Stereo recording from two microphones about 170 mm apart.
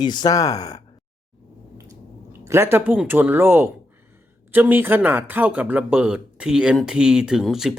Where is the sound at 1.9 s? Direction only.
15° right (ahead or behind).